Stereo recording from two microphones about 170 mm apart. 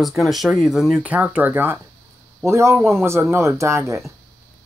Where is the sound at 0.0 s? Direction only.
Centre (ahead or behind); by 4.0 s 15° right (ahead or behind).